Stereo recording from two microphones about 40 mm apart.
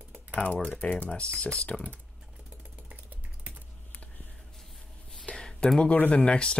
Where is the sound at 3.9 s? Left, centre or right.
Left.